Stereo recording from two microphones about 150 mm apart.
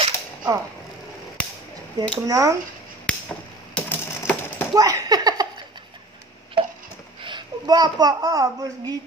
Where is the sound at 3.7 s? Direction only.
10° left (ahead or behind).